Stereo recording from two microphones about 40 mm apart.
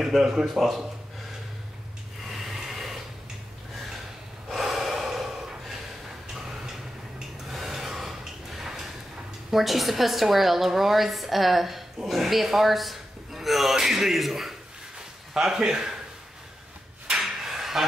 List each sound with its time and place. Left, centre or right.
0.1 s a woman's voice: centre
2.2 s a sound: centre
4.5 s gasp: centre
6.6 s a sound: centre
9.5 s a woman's voice: centre
15.3 s speech: centre
17.4 s hammer: centre